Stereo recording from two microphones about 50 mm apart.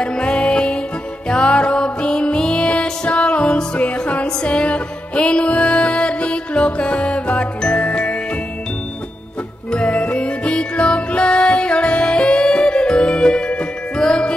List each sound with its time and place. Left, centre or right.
0.0 s music: centre
7.6 s jingle: centre
9.7 s music: left